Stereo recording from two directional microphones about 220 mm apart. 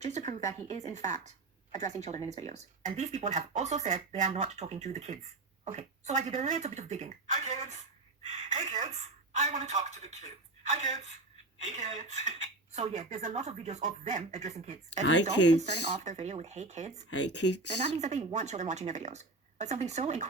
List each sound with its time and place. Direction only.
0.0 s speech: 30° right (ahead or behind)
16.0 s speech: 30° right (ahead or behind)
17.1 s speech: 55° left (ahead or behind)
17.4 s speech: 90° left
17.9 s speech: 30° right (ahead or behind)